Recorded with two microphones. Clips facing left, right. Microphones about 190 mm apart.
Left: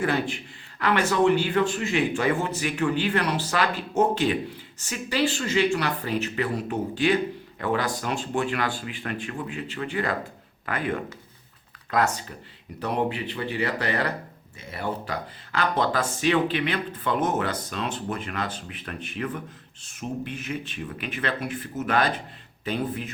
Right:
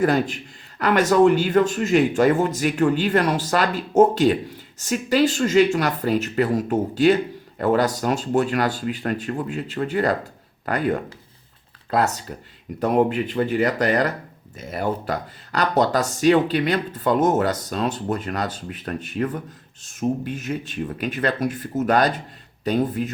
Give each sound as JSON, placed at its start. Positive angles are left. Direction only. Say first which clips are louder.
{"t": 0.0, "sound": "speech", "louder": "right 6 dB", "side_deg": -40}
{"t": 12.8, "sound": "speech", "louder": "right 7 dB", "side_deg": -45}